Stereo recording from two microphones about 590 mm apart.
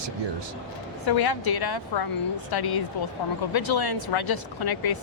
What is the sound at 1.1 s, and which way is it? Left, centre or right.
Speech, left.